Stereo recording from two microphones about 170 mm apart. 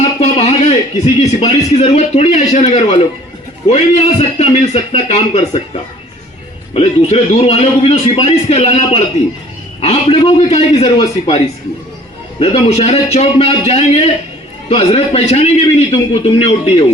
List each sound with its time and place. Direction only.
0.2 s a sound: 40° left (ahead or behind)
1.2 s a man's voice: 35° left (ahead or behind)
6.7 s a man's voice: 35° left (ahead or behind)
12.4 s a man's voice: 35° left (ahead or behind)